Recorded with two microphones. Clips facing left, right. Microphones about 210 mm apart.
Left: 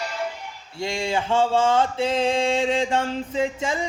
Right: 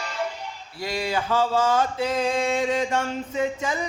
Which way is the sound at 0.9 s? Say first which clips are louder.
Left 1 dB; 25° left (ahead or behind).